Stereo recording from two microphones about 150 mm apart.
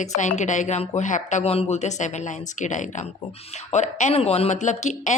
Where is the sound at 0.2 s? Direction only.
55° left (ahead or behind).